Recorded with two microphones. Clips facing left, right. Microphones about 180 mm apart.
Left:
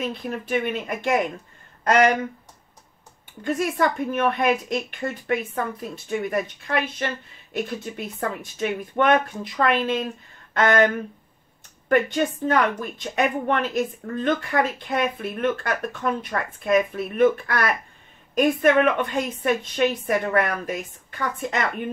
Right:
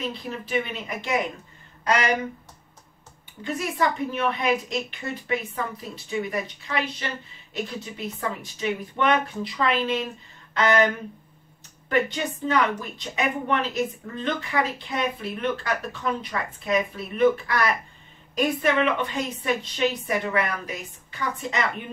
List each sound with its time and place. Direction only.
0.1 s speech: 50° left (ahead or behind)
3.4 s speech: 50° left (ahead or behind)
11.9 s speech: 50° left (ahead or behind)